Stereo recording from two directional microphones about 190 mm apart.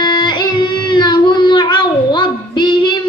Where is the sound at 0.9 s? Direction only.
25° left (ahead or behind).